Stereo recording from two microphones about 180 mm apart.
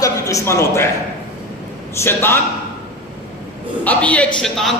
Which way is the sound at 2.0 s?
15° left (ahead or behind).